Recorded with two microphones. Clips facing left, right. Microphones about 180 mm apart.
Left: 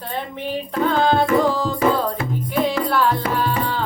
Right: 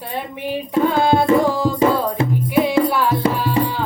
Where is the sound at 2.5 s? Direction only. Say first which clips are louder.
Right 3 dB; 10° right (ahead or behind).